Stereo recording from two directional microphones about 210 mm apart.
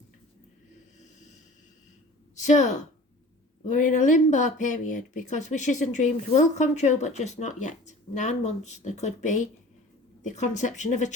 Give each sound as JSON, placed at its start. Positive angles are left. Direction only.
{"t": 2.3, "sound": "a woman's voice", "side_deg": 35}